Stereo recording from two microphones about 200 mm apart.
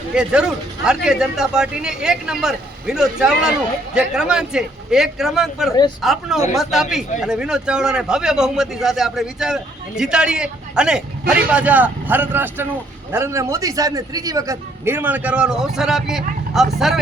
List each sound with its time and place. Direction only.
0.1 s a man's voice: 5° right (ahead or behind)